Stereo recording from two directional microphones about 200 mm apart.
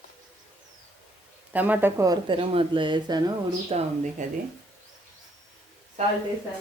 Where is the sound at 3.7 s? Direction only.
35° right (ahead or behind).